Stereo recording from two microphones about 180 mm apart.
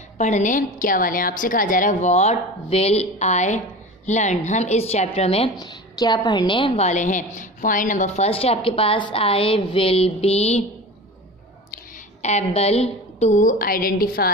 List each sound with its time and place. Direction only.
0.2 s a woman's voice: 45° left (ahead or behind)
5.6 s a woman's voice: 20° left (ahead or behind); by 8.3 s 45° left (ahead or behind)
8.3 s a woman's voice: 30° left (ahead or behind)
12.2 s a woman's voice: 40° left (ahead or behind); by 14.3 s 55° left (ahead or behind)